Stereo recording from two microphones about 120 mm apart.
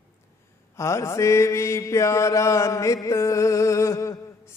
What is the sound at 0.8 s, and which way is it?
Mantra, 25° left (ahead or behind).